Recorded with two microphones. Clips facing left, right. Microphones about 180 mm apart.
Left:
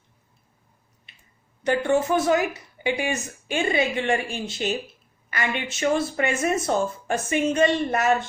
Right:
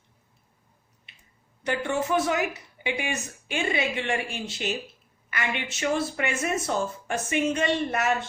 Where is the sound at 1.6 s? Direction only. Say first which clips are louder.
Left 6 dB; 40° left (ahead or behind).